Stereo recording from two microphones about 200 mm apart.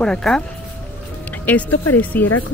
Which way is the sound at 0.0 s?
5° left (ahead or behind).